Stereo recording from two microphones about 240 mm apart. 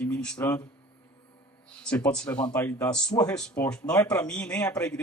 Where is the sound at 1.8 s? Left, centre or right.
Centre.